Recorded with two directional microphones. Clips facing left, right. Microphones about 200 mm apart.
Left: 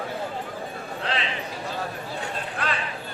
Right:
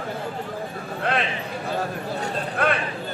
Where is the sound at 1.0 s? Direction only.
55° right (ahead or behind).